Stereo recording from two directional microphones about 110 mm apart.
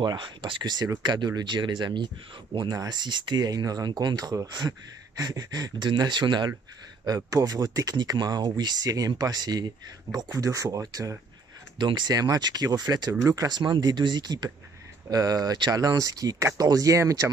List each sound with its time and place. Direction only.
0.0 s speech: 45° right (ahead or behind)
7.1 s speech: 30° right (ahead or behind)